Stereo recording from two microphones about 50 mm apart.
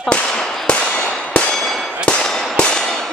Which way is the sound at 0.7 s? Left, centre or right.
Left.